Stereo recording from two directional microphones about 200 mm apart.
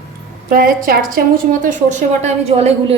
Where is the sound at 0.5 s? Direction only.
45° right (ahead or behind).